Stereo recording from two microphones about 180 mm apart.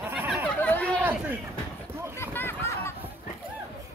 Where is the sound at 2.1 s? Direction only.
15° left (ahead or behind).